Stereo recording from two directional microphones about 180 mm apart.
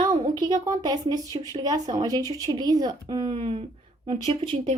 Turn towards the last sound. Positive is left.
turn(degrees=-30)  # may be behind; listen again after turning